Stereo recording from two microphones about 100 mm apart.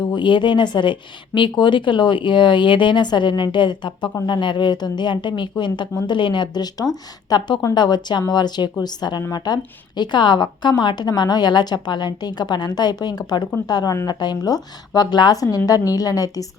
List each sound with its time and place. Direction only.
0.1 s speech: 50° left (ahead or behind); by 16.5 s 35° left (ahead or behind)